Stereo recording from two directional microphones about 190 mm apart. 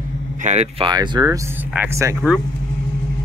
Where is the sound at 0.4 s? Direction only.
35° right (ahead or behind).